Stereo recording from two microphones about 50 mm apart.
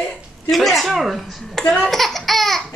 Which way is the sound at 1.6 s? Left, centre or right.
Left.